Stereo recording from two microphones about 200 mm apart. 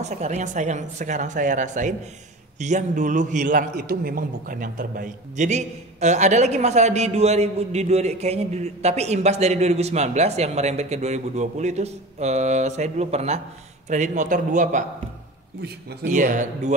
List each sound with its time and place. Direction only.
0.0 s a man's voice: 35° right (ahead or behind)